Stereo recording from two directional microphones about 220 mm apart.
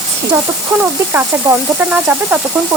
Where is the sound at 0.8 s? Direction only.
10° right (ahead or behind).